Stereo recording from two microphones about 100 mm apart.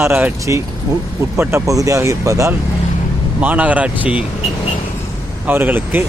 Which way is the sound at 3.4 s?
15° right (ahead or behind).